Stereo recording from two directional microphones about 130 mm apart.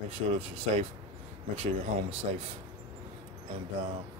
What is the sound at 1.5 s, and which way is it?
Speech, 50° right (ahead or behind).